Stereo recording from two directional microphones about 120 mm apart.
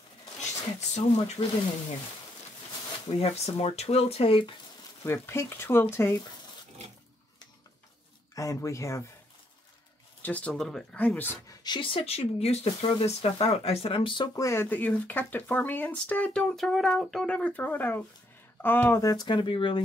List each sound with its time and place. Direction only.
0.4 s speech: 70° left (ahead or behind)
3.2 s speech: 60° left (ahead or behind)
5.0 s speech: 20° left (ahead or behind)
8.4 s speech: 25° left (ahead or behind)
10.2 s speech: 10° left (ahead or behind)
11.4 s speech: 35° left (ahead or behind)
14.3 s speech: 25° left (ahead or behind)
18.9 s speech: 30° left (ahead or behind)